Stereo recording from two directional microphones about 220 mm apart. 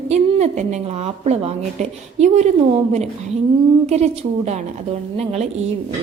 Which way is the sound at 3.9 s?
30° right (ahead or behind).